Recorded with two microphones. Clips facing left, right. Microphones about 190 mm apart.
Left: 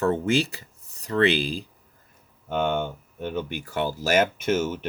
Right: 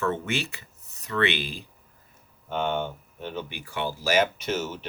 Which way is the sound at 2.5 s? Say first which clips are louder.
Left 3 dB; 50° left (ahead or behind).